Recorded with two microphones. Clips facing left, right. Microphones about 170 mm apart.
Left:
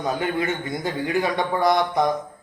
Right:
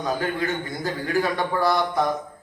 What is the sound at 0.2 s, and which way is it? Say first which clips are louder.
A man's voice: left 1 dB; 20° left (ahead or behind).